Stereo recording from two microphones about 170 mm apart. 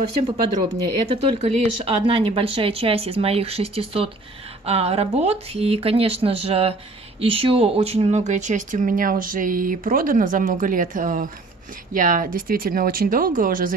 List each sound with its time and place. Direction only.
1.1 s speech: 35° right (ahead or behind); by 13.7 s 55° right (ahead or behind)